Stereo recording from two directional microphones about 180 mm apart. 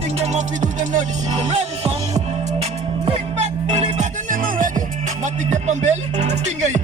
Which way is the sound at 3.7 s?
45° right (ahead or behind).